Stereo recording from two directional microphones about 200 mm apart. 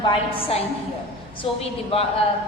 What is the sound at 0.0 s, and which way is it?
A woman's voice, 30° left (ahead or behind).